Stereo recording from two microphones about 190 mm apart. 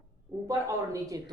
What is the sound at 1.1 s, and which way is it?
Speech, 20° right (ahead or behind).